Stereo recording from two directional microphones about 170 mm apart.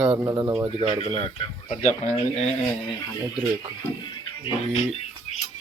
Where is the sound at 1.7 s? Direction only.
45° left (ahead or behind).